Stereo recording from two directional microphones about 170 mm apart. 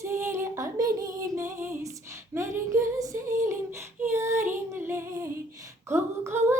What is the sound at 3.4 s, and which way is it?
Child singing, 15° right (ahead or behind).